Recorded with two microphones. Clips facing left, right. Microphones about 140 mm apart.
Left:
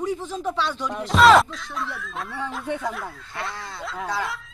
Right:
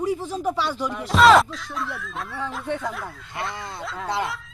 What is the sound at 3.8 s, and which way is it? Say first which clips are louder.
Speech: left 1 dB; centre (ahead or behind).